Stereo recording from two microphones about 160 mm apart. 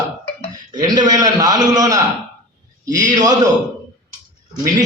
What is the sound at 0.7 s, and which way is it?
A man's voice, 25° right (ahead or behind).